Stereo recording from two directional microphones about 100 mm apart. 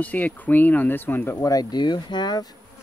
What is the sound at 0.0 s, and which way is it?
Speech, 15° left (ahead or behind).